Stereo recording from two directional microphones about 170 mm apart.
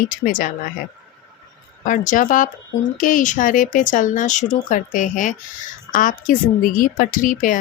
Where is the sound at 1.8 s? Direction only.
50° left (ahead or behind).